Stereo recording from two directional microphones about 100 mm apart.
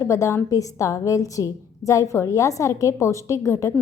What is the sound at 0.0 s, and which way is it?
A woman's voice, 30° left (ahead or behind).